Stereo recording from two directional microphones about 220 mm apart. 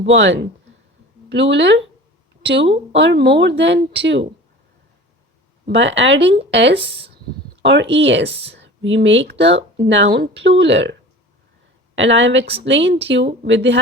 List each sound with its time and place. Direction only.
0.1 s speech: 60° right (ahead or behind)
2.6 s speech: 25° right (ahead or behind)
3.0 s speech: 50° right (ahead or behind)
5.6 s speech: 55° right (ahead or behind)
6.7 s speech: 25° right (ahead or behind)
7.6 s speech: 55° right (ahead or behind)
11.9 s speech: 60° right (ahead or behind)